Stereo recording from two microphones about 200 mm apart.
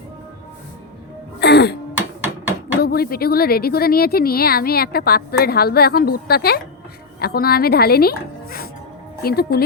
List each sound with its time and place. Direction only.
1.4 s throat clearing: 55° left (ahead or behind)
2.8 s speech: 50° left (ahead or behind)